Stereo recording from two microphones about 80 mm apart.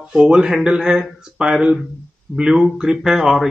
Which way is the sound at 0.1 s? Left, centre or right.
Centre.